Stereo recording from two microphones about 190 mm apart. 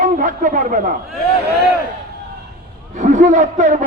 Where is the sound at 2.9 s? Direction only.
45° right (ahead or behind).